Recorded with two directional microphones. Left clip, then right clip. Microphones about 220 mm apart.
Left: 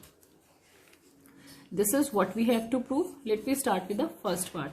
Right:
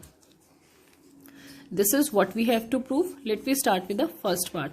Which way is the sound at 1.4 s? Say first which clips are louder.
Right 4 dB; 40° right (ahead or behind).